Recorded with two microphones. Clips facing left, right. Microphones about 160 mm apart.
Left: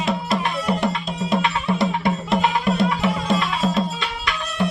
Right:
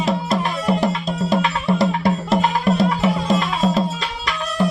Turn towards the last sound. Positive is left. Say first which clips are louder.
# right 3 dB
turn(degrees=0)  # may be behind; listen again after turning